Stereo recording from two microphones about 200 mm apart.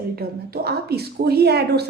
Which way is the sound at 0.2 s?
50° right (ahead or behind).